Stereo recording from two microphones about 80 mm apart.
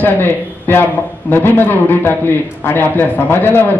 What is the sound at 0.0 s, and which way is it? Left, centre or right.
A man's voice, left.